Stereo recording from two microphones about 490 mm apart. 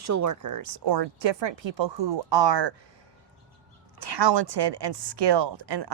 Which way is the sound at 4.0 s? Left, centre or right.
Right.